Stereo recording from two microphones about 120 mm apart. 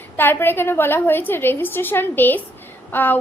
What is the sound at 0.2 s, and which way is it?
A woman's voice, 15° left (ahead or behind).